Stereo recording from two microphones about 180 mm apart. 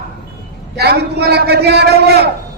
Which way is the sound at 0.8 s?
65° right (ahead or behind).